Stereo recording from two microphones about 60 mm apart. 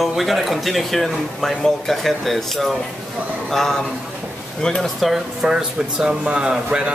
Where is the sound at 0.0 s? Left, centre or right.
Centre.